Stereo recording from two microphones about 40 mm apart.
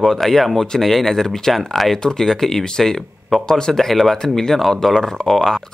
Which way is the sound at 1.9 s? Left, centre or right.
Centre.